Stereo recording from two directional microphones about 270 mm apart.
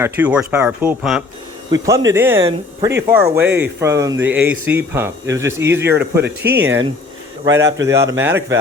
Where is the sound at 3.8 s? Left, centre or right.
Centre.